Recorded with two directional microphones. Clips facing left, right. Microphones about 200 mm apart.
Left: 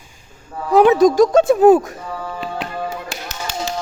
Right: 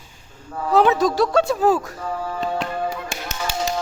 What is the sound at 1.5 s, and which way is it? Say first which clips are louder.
Speech: left 8 dB; 20° left (ahead or behind).